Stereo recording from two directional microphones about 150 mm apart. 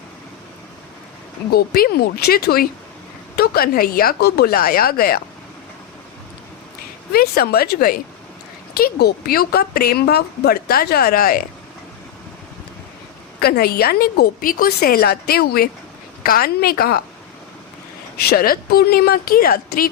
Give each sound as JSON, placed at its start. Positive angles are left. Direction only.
{"t": 1.5, "sound": "speech", "side_deg": 90}
{"t": 7.1, "sound": "speech", "side_deg": 90}
{"t": 13.4, "sound": "speech", "side_deg": 90}
{"t": 18.2, "sound": "a woman's voice", "side_deg": 85}